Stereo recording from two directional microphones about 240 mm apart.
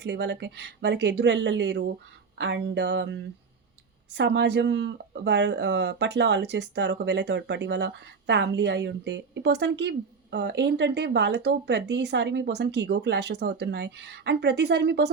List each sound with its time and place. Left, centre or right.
0.0 s speech: right